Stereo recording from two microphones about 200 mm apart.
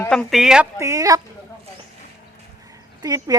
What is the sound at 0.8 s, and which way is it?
Speech, 15° right (ahead or behind).